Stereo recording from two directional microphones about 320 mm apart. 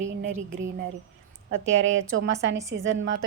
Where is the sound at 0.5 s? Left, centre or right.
Right.